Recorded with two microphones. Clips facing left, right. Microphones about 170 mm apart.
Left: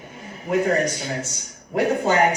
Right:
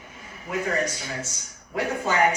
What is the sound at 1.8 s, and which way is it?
Speech, 35° left (ahead or behind).